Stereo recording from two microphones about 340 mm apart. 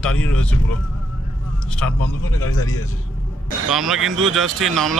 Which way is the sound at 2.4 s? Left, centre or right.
Left.